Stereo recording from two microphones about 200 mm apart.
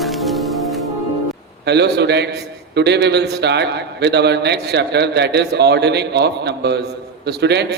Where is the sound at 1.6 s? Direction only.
55° right (ahead or behind).